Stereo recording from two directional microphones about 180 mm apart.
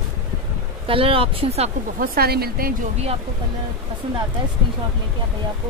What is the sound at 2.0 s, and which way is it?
Speech, 60° right (ahead or behind).